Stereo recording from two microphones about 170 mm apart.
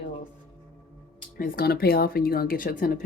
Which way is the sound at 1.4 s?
60° left (ahead or behind).